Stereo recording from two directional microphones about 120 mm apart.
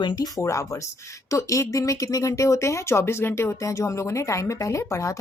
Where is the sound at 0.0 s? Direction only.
35° left (ahead or behind).